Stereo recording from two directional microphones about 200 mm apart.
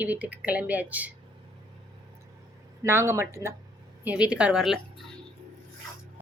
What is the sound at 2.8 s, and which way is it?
A woman's voice, 15° right (ahead or behind).